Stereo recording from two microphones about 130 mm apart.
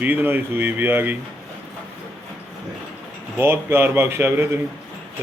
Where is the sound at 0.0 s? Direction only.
15° right (ahead or behind).